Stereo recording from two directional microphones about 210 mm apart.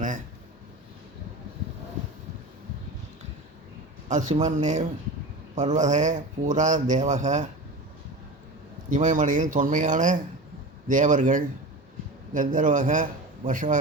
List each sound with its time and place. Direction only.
4.1 s speech: 35° right (ahead or behind)
8.9 s speech: 35° right (ahead or behind)